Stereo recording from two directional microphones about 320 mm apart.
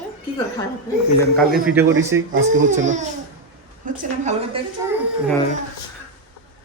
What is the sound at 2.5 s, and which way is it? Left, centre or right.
A woman's voice, right.